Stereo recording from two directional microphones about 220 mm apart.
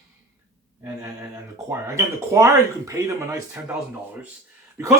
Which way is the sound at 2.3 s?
15° right (ahead or behind).